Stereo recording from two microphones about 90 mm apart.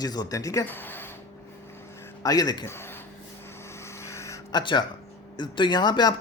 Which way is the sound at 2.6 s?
30° left (ahead or behind).